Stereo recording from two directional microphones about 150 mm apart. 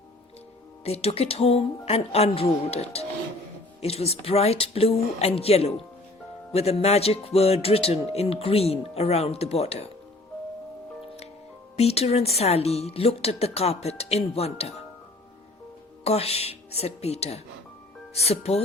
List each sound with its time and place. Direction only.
0.9 s speech: 45° left (ahead or behind)
11.8 s speech: 45° left (ahead or behind)
16.0 s speech: 45° left (ahead or behind)